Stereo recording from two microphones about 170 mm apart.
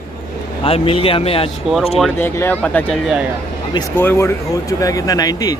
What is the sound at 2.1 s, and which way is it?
Speech, 15° left (ahead or behind).